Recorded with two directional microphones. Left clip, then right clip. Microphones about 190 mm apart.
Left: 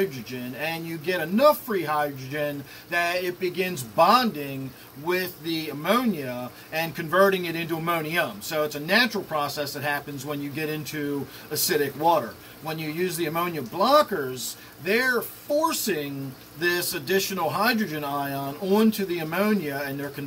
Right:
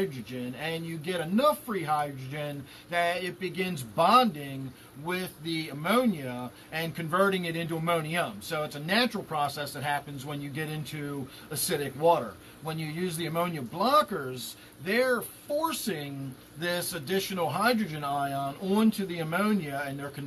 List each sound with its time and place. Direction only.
0.0 s speech: 15° right (ahead or behind)
13.2 s speech: 15° right (ahead or behind)